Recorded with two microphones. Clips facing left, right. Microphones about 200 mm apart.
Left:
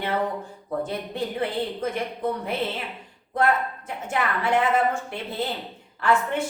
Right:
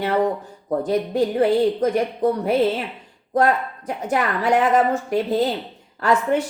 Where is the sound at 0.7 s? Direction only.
40° right (ahead or behind).